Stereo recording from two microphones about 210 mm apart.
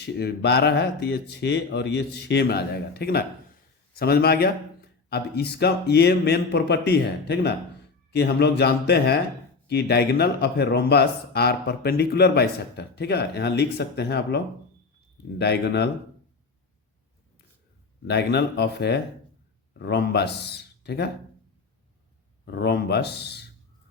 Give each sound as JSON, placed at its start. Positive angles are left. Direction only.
{"t": 0.0, "sound": "speech", "side_deg": 50}
{"t": 18.0, "sound": "speech", "side_deg": 50}
{"t": 22.4, "sound": "speech", "side_deg": 55}